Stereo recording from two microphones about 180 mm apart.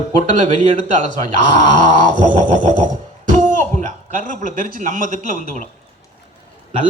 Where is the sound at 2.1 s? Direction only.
45° right (ahead or behind).